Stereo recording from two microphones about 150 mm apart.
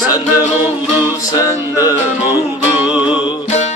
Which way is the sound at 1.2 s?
25° left (ahead or behind).